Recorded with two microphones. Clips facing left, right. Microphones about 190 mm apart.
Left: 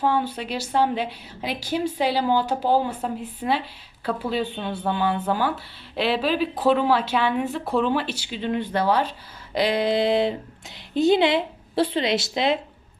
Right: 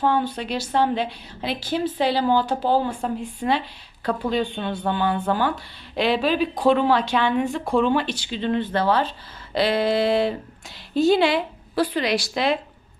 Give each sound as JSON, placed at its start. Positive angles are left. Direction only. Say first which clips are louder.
{"t": 0.0, "sound": "a woman's voice", "louder": "right 1 dB", "side_deg": 5}